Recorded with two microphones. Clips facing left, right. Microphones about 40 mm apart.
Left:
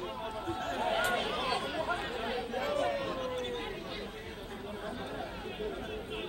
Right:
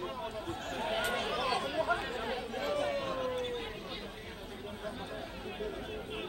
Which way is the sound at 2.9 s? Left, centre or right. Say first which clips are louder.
Even; right.